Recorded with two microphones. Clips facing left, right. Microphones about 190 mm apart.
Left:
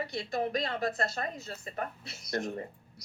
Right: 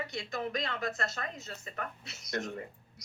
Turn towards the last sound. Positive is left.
turn(degrees=35)  # may be behind; listen again after turning